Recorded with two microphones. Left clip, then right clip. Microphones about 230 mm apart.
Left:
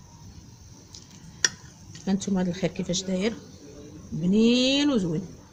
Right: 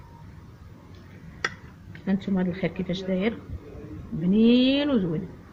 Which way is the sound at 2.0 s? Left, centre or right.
Left.